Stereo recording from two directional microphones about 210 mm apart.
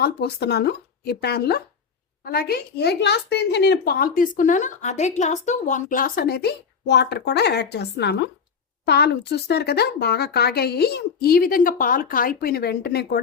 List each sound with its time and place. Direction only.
0.0 s speech: 50° left (ahead or behind)